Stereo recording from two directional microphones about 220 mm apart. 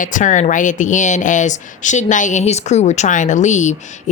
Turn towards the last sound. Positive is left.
turn(degrees=35)  # may be behind; listen again after turning